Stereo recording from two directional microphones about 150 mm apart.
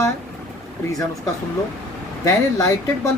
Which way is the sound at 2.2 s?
20° left (ahead or behind).